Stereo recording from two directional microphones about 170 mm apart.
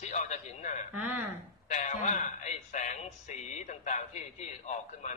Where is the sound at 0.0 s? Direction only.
45° left (ahead or behind).